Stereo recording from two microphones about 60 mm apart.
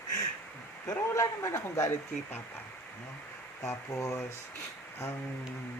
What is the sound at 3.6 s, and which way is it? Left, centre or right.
Speech, left.